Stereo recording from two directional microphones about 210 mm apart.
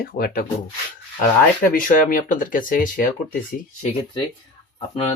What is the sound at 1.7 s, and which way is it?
Speech, 40° left (ahead or behind).